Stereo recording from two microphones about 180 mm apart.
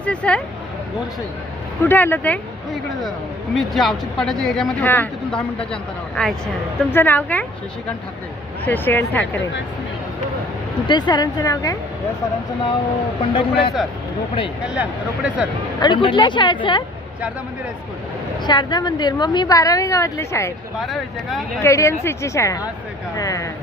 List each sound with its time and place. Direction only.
0.0 s speech: 5° left (ahead or behind)
1.8 s speech: 10° left (ahead or behind)
3.5 s speech: centre (ahead or behind)
8.6 s speech: 10° left (ahead or behind)
10.8 s a woman's voice: 25° left (ahead or behind)
13.3 s speech: 30° left (ahead or behind)
14.6 s speech: 5° right (ahead or behind)
15.8 s a woman's voice: 25° left (ahead or behind)
18.4 s a woman's voice: 25° left (ahead or behind)
20.7 s speech: centre (ahead or behind)
21.6 s a woman's voice: 15° left (ahead or behind)